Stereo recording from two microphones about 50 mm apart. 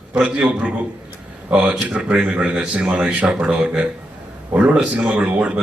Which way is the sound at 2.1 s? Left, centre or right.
Right.